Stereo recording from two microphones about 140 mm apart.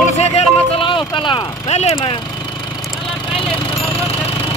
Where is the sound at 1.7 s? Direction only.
50° left (ahead or behind).